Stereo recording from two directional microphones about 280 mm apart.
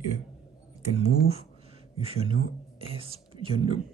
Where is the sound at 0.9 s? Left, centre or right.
Right.